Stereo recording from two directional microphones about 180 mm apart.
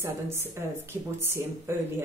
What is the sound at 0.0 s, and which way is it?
A woman's voice, 15° right (ahead or behind).